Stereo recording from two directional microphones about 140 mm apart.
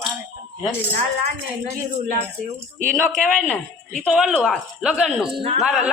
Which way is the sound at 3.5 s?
5° left (ahead or behind).